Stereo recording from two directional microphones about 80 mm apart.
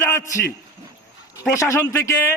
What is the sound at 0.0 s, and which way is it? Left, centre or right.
A man's voice, left.